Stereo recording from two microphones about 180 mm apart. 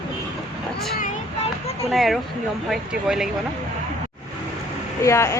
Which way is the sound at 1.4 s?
35° left (ahead or behind).